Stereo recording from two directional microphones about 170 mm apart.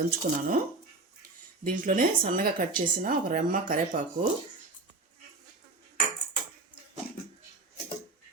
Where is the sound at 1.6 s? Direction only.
55° right (ahead or behind).